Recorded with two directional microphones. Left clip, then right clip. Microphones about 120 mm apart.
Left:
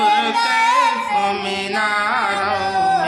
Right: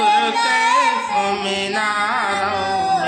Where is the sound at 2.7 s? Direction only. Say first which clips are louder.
Left 2 dB; 30° left (ahead or behind).